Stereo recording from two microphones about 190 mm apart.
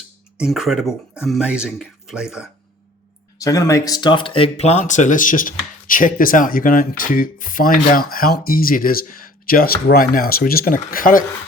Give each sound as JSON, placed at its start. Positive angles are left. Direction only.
{"t": 0.3, "sound": "speech", "side_deg": 0}
{"t": 3.3, "sound": "speech", "side_deg": 15}